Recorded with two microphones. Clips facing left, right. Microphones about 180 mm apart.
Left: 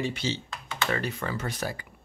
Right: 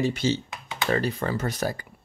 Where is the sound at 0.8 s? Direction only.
35° right (ahead or behind).